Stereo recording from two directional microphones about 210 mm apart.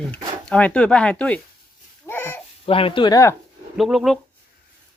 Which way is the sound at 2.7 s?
25° left (ahead or behind).